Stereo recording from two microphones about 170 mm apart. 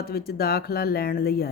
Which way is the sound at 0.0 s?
60° left (ahead or behind).